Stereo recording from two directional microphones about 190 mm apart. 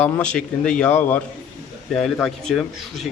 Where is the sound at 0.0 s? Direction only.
5° left (ahead or behind).